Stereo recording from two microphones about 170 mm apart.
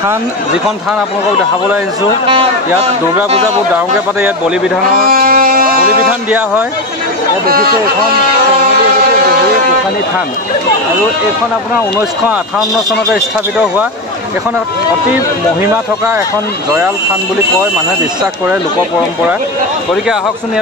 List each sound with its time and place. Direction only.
5.1 s music: 60° right (ahead or behind)
7.4 s speech: 60° right (ahead or behind)
13.1 s a man's voice: 10° right (ahead or behind)
15.6 s a man's voice: 10° right (ahead or behind)